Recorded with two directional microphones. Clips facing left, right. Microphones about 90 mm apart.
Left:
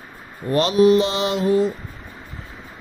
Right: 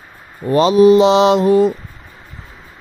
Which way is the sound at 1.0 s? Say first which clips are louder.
Right 9 dB; 90° right.